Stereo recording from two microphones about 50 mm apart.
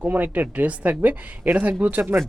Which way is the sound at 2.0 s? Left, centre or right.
Right.